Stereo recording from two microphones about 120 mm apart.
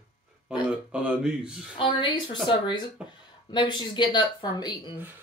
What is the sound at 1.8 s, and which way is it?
A woman's voice, 40° left (ahead or behind).